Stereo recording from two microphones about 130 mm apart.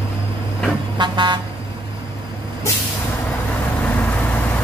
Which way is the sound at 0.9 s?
35° right (ahead or behind).